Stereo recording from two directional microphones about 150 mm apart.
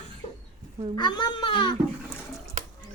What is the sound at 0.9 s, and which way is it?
Speech, 30° left (ahead or behind).